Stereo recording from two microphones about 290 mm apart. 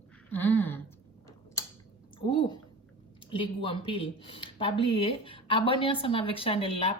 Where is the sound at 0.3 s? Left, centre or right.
Centre.